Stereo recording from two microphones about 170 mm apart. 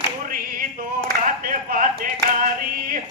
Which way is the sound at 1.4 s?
55° right (ahead or behind).